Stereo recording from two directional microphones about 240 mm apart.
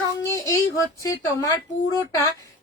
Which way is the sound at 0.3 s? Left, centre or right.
Centre.